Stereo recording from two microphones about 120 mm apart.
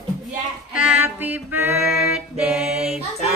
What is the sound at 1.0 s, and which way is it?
Music, 15° right (ahead or behind).